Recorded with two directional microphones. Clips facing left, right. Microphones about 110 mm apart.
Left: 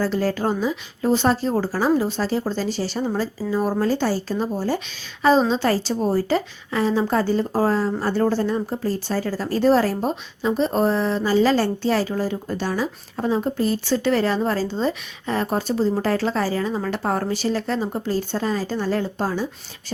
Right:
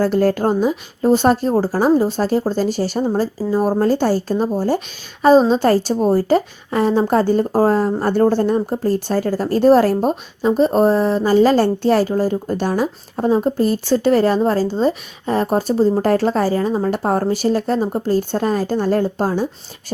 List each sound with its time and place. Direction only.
0.0 s a woman's voice: 50° right (ahead or behind)
13.1 s a woman's voice: 40° right (ahead or behind)